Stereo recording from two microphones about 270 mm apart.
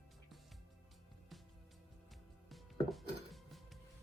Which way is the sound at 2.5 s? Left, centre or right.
Centre.